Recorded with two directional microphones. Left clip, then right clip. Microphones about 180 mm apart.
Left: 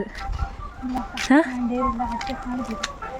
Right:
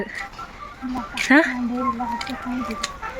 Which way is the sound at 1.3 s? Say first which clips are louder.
Right 3 dB; 15° left (ahead or behind).